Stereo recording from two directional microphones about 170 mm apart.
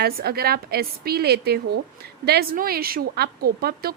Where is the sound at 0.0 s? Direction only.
65° right (ahead or behind).